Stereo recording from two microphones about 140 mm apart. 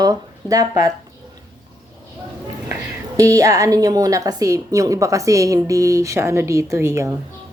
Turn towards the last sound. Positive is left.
turn(degrees=-20)  # may be behind; listen again after turning